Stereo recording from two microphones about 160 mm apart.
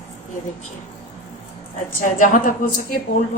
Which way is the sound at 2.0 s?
55° left (ahead or behind).